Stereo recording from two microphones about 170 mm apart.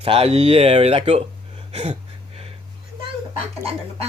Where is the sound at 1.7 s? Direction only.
35° right (ahead or behind).